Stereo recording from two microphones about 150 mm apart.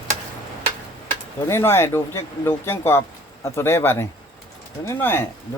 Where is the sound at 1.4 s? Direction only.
15° left (ahead or behind).